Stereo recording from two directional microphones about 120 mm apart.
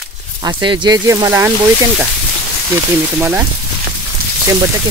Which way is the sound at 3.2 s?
15° right (ahead or behind).